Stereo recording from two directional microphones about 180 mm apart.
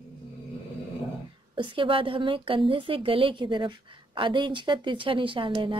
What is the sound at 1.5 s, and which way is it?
A woman's voice, 30° right (ahead or behind).